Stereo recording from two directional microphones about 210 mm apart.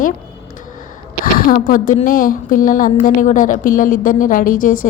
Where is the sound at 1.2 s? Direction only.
40° left (ahead or behind).